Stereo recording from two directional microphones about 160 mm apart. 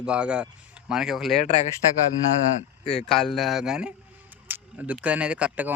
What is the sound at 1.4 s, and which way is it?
Speech, 45° left (ahead or behind).